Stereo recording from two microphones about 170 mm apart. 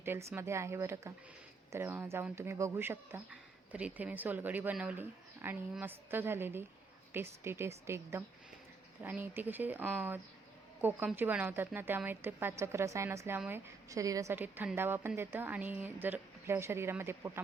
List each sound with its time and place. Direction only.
0.0 s speech: 15° right (ahead or behind)